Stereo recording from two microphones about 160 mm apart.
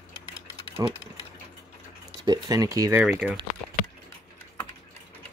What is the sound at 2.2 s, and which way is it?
Speech, 25° right (ahead or behind).